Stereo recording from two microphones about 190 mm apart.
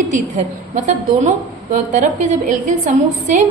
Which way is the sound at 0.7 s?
40° right (ahead or behind).